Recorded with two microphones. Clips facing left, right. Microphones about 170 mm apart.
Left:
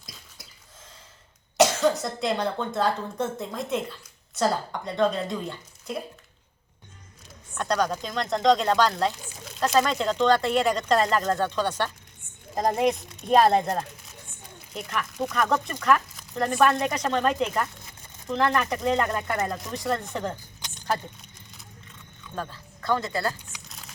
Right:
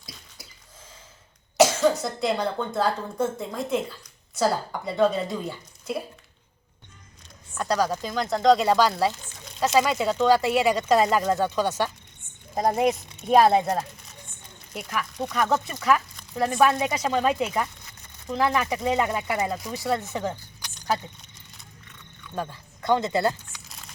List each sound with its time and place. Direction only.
1.5 s speech: centre (ahead or behind)
7.5 s speech: 5° right (ahead or behind)
22.4 s speech: 15° right (ahead or behind)
23.6 s a sound: centre (ahead or behind)